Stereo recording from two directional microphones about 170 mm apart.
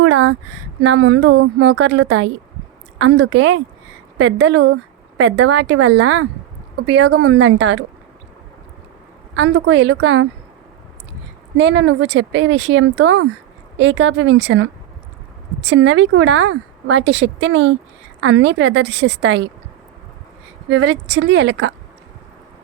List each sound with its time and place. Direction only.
0.1 s a woman's voice: 90° right
9.3 s a woman's voice: 90° right
11.5 s a woman's voice: 90° right
15.7 s a woman's voice: 90° right
20.7 s a woman's voice: 90° right